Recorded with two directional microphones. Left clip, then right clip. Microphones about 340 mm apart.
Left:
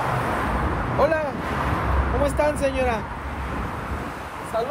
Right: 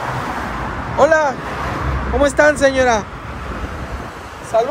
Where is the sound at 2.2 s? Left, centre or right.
Right.